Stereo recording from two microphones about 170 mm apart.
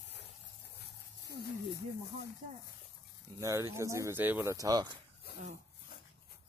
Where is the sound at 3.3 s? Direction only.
15° right (ahead or behind).